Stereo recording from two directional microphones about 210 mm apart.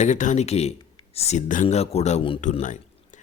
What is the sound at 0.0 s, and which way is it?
A man's voice, 35° left (ahead or behind).